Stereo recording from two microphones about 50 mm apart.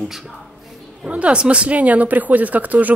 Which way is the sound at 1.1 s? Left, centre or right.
Right.